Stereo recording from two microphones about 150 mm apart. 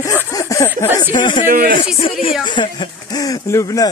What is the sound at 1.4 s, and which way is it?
Speech, 65° right (ahead or behind).